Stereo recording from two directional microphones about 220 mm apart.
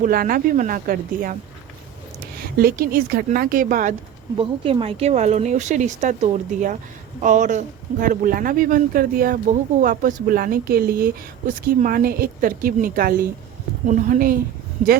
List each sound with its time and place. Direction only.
0.0 s speech: 40° right (ahead or behind)
2.6 s speech: 40° right (ahead or behind)
4.4 s speech: 25° right (ahead or behind)